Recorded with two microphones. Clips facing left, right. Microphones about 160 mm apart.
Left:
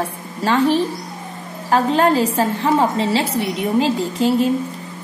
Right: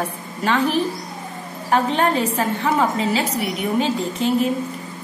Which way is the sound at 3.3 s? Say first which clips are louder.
Left 3 dB; centre (ahead or behind).